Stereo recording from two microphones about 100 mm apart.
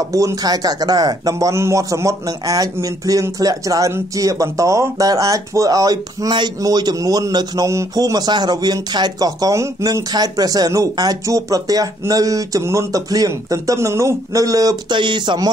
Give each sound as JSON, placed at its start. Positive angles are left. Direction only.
{"t": 0.1, "sound": "speech", "side_deg": -35}
{"t": 10.1, "sound": "speech", "side_deg": -40}